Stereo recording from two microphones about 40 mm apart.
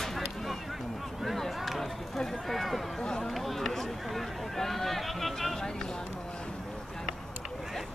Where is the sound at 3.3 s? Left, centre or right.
Centre.